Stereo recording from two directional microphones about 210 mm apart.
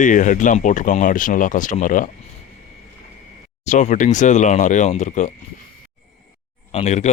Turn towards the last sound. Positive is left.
turn(degrees=35)  # may be behind; listen again after turning